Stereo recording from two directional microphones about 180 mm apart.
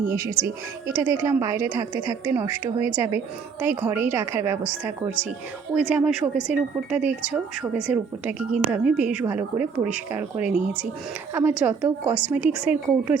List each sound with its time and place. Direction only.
0.1 s a woman's voice: 15° right (ahead or behind)